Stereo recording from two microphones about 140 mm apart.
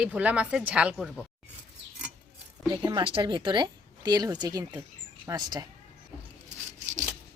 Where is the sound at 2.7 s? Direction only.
35° right (ahead or behind).